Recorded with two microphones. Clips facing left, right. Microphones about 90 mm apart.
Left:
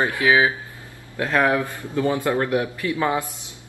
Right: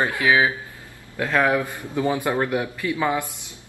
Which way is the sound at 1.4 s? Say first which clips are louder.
Left 1 dB; 20° right (ahead or behind).